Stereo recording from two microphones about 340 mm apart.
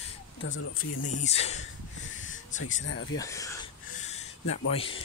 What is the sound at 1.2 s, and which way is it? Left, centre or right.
Speech, centre.